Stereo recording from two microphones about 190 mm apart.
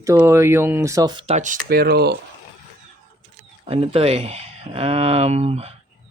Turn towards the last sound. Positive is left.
turn(degrees=-35)  # may be behind; listen again after turning